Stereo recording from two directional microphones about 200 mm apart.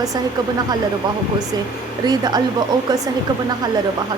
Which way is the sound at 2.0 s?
20° right (ahead or behind).